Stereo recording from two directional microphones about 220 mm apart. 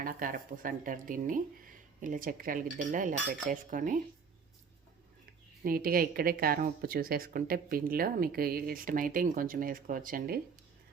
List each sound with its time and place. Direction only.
0.0 s speech: 40° right (ahead or behind)
5.6 s speech: 40° right (ahead or behind)